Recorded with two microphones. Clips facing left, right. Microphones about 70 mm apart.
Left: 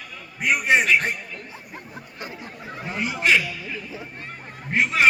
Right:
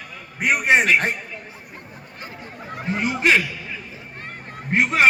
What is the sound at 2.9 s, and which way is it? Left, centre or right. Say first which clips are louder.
Speech: right 4 dB; right.